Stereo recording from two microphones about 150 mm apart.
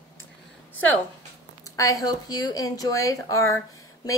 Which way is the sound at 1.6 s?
20° left (ahead or behind).